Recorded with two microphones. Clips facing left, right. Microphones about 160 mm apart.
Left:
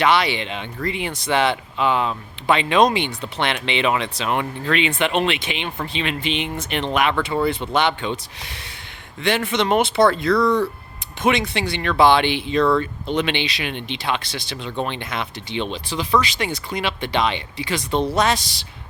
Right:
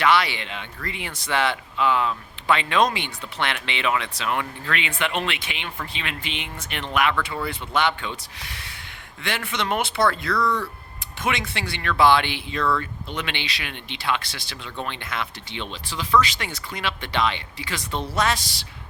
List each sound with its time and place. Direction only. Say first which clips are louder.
0.0 s speech: left 2 dB; 20° left (ahead or behind)